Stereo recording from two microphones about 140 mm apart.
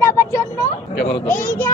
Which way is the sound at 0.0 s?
20° left (ahead or behind).